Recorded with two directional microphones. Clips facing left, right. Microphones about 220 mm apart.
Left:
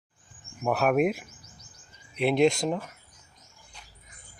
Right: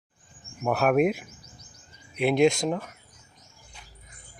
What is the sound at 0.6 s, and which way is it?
Speech, centre (ahead or behind).